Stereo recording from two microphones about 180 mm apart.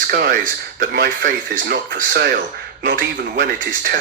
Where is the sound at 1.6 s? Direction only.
55° right (ahead or behind).